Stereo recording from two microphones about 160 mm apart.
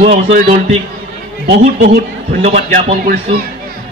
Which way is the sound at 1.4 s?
50° right (ahead or behind).